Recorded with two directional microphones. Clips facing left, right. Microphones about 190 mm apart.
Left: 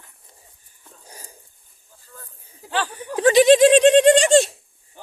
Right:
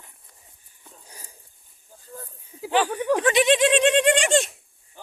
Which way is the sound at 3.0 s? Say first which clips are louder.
Right 6 dB; 80° right.